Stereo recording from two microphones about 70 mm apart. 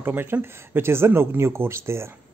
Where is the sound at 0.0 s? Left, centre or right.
Right.